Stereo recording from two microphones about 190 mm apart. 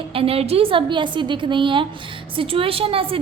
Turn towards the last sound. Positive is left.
turn(degrees=-30)  # may be behind; listen again after turning